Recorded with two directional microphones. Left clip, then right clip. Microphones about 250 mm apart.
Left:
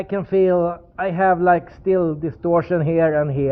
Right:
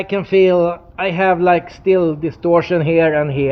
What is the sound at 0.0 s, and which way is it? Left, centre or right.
A man's voice, centre.